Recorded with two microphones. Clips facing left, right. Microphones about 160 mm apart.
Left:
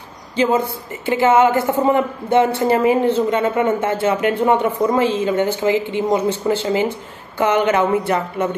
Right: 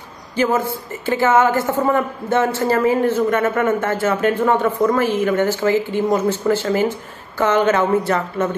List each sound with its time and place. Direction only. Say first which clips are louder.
1.0 s a man's voice: left 2 dB; 20° left (ahead or behind)